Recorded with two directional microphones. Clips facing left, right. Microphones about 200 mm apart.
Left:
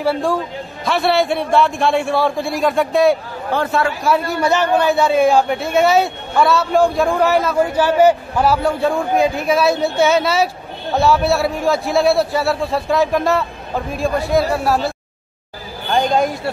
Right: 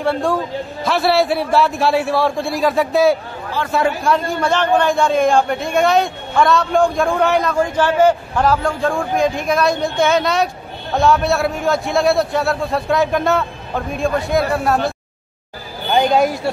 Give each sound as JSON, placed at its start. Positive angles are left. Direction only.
{"t": 0.0, "sound": "a man's voice", "side_deg": 0}
{"t": 3.5, "sound": "a man's voice", "side_deg": 55}
{"t": 4.0, "sound": "a man's voice", "side_deg": 5}
{"t": 15.9, "sound": "a man's voice", "side_deg": 0}